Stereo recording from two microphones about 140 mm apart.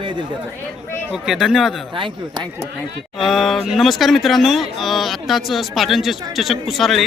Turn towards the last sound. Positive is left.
turn(degrees=0)  # may be behind; listen again after turning